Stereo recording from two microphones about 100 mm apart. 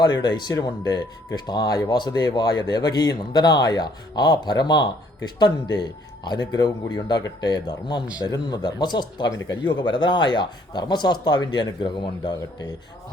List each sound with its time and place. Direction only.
0.0 s speech: 45° left (ahead or behind)